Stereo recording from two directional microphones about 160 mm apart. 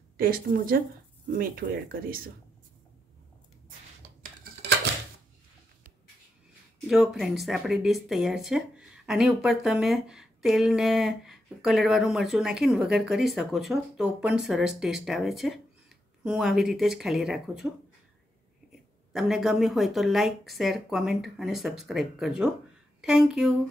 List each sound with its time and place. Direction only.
0.2 s speech: 65° right (ahead or behind)
6.9 s speech: centre (ahead or behind)